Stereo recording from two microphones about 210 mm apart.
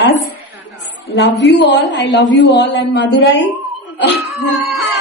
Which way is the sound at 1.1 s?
55° left (ahead or behind).